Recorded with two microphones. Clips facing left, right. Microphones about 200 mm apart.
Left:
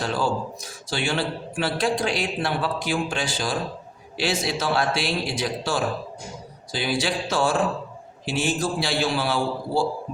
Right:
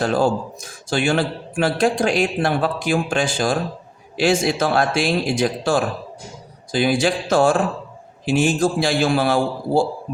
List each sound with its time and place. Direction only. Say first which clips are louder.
0.0 s speech: right 6 dB; 50° right (ahead or behind)